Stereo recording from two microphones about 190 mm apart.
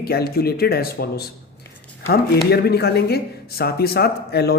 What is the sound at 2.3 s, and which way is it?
Speech, 55° left (ahead or behind).